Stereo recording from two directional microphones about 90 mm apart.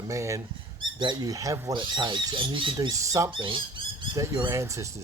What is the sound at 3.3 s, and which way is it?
Speech, 65° right (ahead or behind).